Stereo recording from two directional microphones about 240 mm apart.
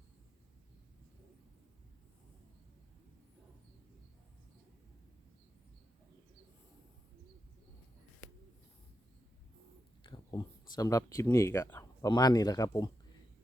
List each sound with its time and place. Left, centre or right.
10.0 s speech: centre